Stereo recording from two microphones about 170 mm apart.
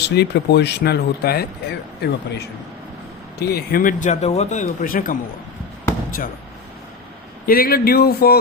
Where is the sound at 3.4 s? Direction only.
70° left (ahead or behind).